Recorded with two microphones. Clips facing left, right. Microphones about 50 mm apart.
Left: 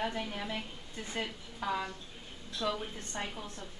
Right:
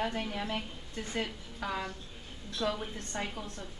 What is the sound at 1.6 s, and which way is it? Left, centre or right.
Speech, centre.